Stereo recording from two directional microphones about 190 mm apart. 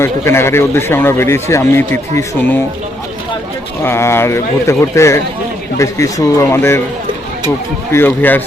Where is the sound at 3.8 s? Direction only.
15° left (ahead or behind).